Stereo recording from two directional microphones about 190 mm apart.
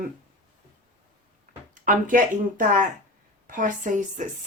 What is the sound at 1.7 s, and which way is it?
Speech, 45° right (ahead or behind).